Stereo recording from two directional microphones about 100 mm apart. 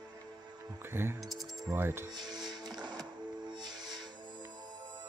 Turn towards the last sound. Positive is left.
turn(degrees=-45)  # may be behind; listen again after turning